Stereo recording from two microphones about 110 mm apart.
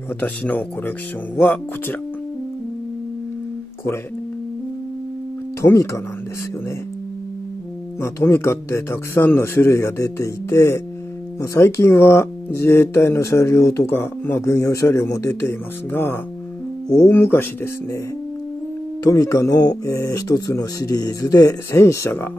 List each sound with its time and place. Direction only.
0.2 s speech: 15° left (ahead or behind)
5.6 s speech: 30° left (ahead or behind)
8.0 s speech: 25° left (ahead or behind)
19.0 s speech: 30° left (ahead or behind)